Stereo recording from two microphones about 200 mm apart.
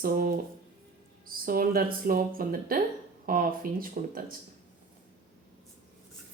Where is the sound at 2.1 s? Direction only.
45° right (ahead or behind).